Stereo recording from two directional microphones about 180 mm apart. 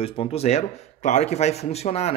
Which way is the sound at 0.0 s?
30° left (ahead or behind).